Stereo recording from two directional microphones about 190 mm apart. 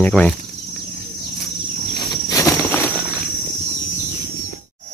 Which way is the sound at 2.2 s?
15° left (ahead or behind).